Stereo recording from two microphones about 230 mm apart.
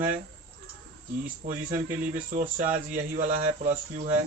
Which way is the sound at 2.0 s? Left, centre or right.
Right.